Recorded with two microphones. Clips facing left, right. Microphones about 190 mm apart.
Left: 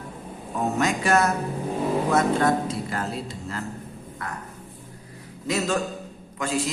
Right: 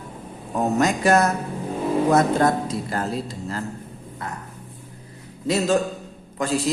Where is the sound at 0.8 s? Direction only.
40° right (ahead or behind).